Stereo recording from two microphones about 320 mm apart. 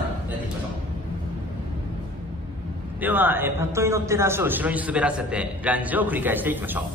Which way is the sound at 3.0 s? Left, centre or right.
Centre.